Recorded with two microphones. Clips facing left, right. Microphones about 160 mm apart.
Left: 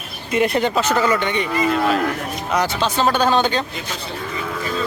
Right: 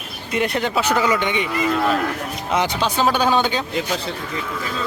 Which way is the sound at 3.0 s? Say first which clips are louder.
Left 1 dB; 10° right (ahead or behind).